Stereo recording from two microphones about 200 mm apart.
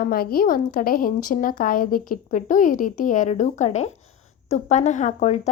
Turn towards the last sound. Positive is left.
turn(degrees=35)  # may be behind; listen again after turning